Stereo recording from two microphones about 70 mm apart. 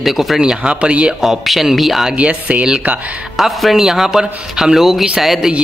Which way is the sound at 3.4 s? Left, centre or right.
Centre.